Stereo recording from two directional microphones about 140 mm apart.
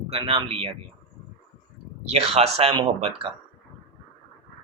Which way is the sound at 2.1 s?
50° right (ahead or behind).